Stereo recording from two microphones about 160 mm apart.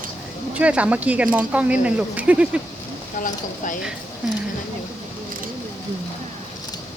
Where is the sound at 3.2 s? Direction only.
55° left (ahead or behind).